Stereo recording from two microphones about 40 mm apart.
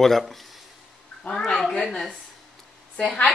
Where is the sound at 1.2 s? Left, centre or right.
Centre.